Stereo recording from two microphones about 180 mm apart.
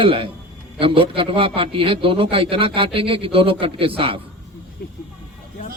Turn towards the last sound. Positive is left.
turn(degrees=-30)  # may be behind; listen again after turning